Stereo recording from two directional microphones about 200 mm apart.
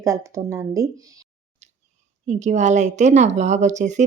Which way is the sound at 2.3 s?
35° right (ahead or behind).